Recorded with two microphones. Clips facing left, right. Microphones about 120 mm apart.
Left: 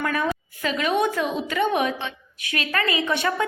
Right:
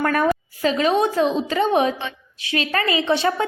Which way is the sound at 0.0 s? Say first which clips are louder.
Right 5 dB; 50° right (ahead or behind).